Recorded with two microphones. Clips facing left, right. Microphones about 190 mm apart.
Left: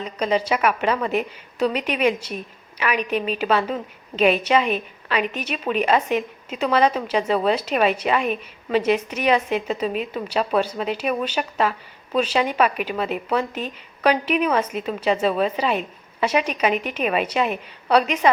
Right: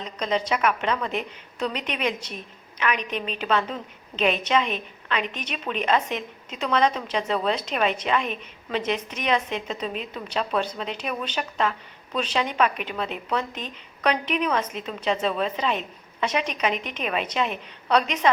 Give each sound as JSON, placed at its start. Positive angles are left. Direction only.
{"t": 0.0, "sound": "a woman's voice", "side_deg": 10}